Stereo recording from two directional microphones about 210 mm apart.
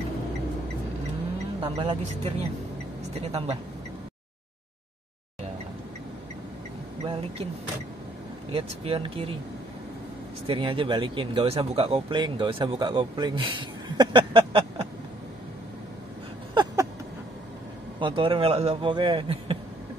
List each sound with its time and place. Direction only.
1.6 s speech: 25° right (ahead or behind)
7.1 s speech: 25° right (ahead or behind)
8.5 s speech: 25° right (ahead or behind)
10.4 s speech: 25° right (ahead or behind)
17.9 s speech: 25° right (ahead or behind)